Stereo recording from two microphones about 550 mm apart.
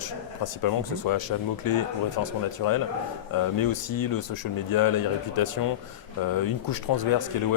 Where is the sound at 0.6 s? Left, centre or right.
Left.